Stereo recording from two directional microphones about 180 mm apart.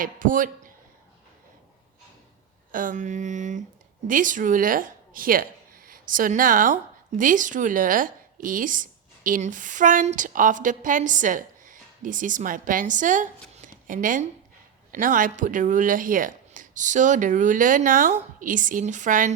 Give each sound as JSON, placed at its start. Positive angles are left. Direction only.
{"t": 0.0, "sound": "a woman's voice", "side_deg": -50}
{"t": 2.7, "sound": "a woman's voice", "side_deg": -45}